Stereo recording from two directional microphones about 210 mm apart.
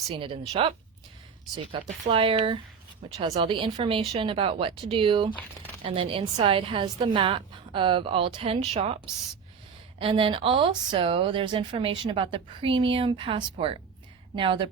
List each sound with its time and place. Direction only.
0.1 s speech: 25° right (ahead or behind)
10.0 s speech: 25° right (ahead or behind)